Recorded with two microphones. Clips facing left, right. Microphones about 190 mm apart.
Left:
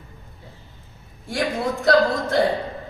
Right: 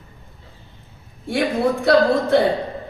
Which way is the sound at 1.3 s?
60° right (ahead or behind).